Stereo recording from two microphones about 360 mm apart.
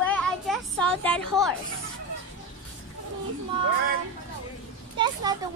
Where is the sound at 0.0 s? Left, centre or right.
Centre.